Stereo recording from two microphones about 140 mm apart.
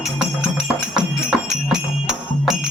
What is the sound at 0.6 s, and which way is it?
Music, centre (ahead or behind).